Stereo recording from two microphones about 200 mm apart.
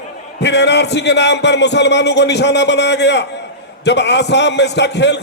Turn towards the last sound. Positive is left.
turn(degrees=60)  # may be behind; listen again after turning